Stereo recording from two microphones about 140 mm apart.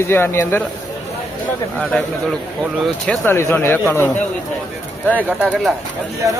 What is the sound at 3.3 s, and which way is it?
Speech, 15° left (ahead or behind).